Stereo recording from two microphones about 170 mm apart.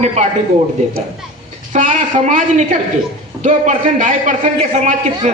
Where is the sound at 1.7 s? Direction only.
45° right (ahead or behind).